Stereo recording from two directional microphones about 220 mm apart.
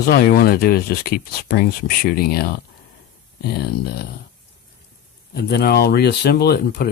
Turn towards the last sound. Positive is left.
turn(degrees=45)  # may be behind; listen again after turning